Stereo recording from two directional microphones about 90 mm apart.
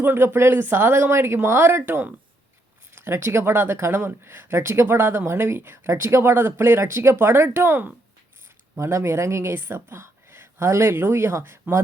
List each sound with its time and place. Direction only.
0.0 s speech: 25° right (ahead or behind)